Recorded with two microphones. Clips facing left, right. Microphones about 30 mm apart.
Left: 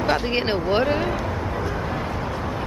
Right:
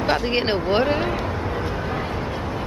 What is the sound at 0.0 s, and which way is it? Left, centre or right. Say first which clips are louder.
Speech: right 1 dB; centre.